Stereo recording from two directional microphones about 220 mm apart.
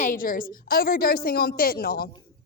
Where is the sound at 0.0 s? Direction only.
40° left (ahead or behind).